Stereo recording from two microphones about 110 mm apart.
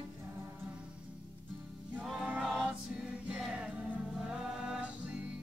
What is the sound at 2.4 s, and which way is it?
Choir, centre (ahead or behind).